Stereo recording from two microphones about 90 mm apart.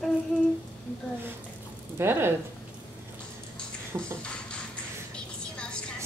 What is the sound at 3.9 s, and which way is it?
Speech, 30° right (ahead or behind).